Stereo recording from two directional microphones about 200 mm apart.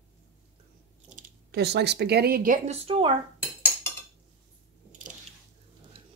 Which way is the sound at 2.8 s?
25° right (ahead or behind).